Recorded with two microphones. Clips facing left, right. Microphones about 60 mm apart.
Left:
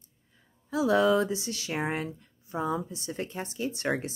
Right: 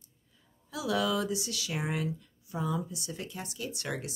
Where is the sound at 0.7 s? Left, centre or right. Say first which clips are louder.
Left 7 dB; left.